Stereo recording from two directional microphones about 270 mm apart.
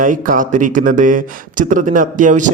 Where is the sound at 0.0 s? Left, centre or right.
Right.